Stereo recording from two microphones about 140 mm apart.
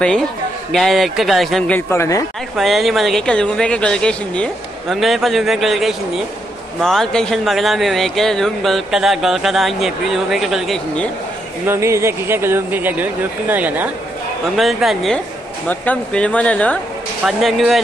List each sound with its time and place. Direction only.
0.7 s speech: centre (ahead or behind)
1.9 s a woman's voice: 20° left (ahead or behind)
2.5 s speech: centre (ahead or behind)
11.6 s speech: 20° right (ahead or behind)
14.6 s speech: centre (ahead or behind)
15.7 s speech: 10° left (ahead or behind)